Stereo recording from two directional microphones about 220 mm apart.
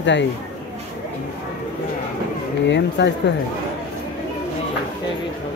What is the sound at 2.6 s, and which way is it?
Speech, 50° left (ahead or behind).